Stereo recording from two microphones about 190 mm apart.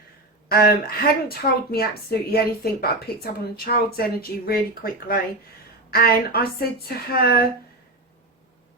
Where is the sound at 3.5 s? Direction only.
55° left (ahead or behind).